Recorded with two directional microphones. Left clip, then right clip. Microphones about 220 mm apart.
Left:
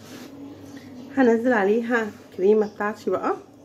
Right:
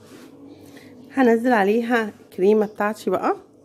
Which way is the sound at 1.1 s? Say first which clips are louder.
Right 2 dB; 40° right (ahead or behind).